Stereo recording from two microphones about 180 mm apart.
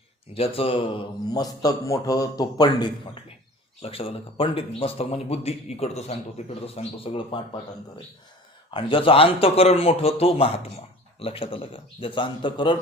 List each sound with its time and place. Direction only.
0.3 s a man's voice: 30° left (ahead or behind)
8.7 s a man's voice: 30° left (ahead or behind)